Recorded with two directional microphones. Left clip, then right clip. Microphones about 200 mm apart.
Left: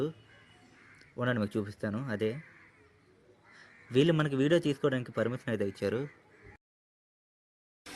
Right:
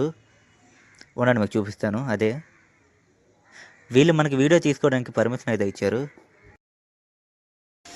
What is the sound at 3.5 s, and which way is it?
A man's voice, 35° right (ahead or behind).